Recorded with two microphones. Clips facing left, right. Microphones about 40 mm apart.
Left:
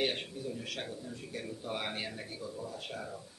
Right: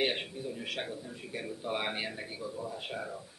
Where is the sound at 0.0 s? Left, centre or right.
Centre.